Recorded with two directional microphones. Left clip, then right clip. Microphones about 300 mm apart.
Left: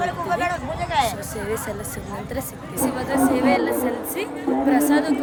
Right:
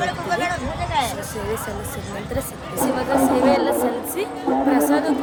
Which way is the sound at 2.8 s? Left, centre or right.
Right.